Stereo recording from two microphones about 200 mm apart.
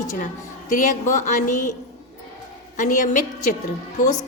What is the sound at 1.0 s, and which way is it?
Speech, 40° left (ahead or behind).